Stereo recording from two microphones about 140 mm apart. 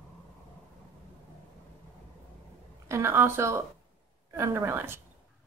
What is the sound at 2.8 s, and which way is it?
A woman's voice, 20° right (ahead or behind).